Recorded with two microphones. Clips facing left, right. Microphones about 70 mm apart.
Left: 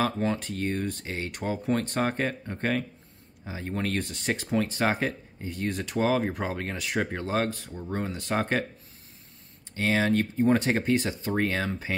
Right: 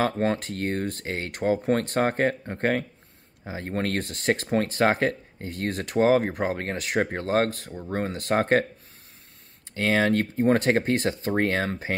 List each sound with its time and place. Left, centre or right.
0.0 s speech: right
6.6 s speech: right
9.8 s speech: right